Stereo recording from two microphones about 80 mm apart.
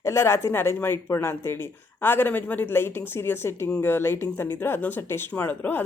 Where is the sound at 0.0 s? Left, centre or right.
Left.